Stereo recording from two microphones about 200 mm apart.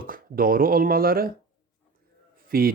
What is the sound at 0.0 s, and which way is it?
Speech, 45° right (ahead or behind).